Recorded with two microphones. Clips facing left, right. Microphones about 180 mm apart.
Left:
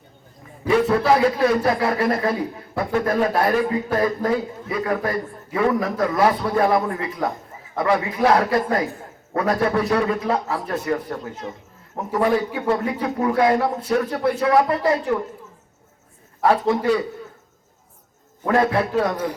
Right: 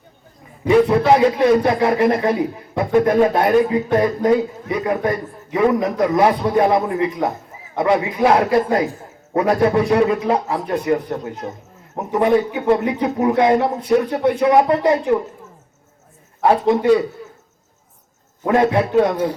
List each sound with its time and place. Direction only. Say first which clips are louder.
0.6 s a man's voice: right 4 dB; 20° right (ahead or behind)
16.4 s a man's voice: right 3 dB; 25° right (ahead or behind)
18.4 s a man's voice: right 3 dB; 25° right (ahead or behind)